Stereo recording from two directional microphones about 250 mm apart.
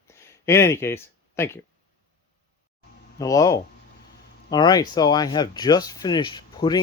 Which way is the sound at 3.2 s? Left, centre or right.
Centre.